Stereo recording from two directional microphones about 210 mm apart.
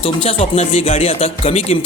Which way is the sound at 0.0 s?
25° left (ahead or behind).